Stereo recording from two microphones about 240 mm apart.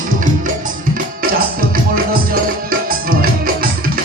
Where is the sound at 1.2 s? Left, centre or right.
Right.